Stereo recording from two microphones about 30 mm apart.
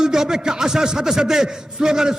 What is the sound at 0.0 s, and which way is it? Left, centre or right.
A man's voice, centre.